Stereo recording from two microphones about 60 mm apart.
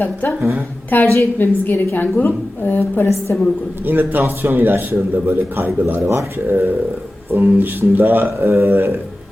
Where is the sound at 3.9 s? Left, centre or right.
Right.